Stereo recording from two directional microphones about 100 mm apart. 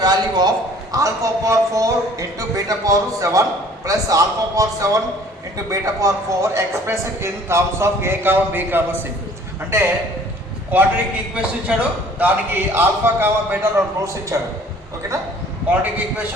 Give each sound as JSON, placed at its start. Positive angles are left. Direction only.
{"t": 0.0, "sound": "a sound", "side_deg": -45}
{"t": 0.9, "sound": "a man's voice", "side_deg": -35}
{"t": 15.7, "sound": "a man's voice", "side_deg": -20}